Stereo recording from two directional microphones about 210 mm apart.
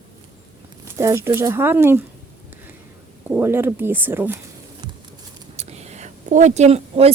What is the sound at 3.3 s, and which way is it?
A woman's voice, 10° right (ahead or behind).